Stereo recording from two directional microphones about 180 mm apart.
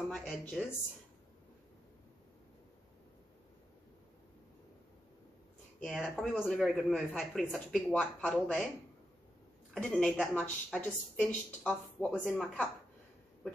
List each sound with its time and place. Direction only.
0.1 s speech: centre (ahead or behind)
5.8 s speech: centre (ahead or behind)
9.8 s speech: 5° left (ahead or behind)